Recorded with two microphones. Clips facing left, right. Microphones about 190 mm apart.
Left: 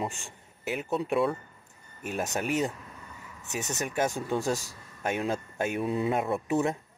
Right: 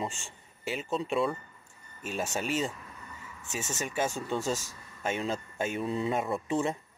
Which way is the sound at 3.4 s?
65° left (ahead or behind).